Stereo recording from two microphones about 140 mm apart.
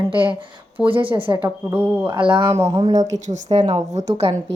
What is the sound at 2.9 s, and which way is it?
Speech, 60° right (ahead or behind).